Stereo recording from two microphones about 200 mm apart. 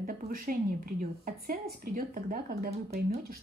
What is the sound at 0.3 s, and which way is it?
A woman's voice, 45° right (ahead or behind).